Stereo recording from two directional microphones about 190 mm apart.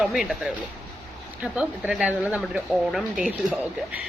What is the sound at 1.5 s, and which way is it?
Speech, 5° right (ahead or behind).